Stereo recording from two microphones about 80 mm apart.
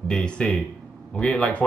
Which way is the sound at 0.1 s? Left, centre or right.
Centre.